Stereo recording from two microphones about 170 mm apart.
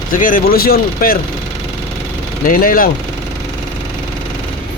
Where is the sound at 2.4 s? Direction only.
55° left (ahead or behind).